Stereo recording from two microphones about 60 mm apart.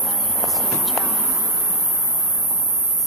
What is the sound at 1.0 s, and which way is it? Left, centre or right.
Speech, right.